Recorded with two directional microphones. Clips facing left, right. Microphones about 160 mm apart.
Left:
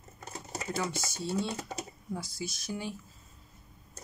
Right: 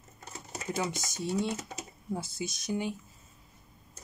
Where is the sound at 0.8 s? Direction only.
15° right (ahead or behind).